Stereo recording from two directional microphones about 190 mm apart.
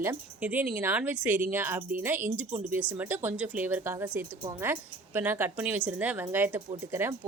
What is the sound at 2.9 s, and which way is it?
Speech, 10° right (ahead or behind).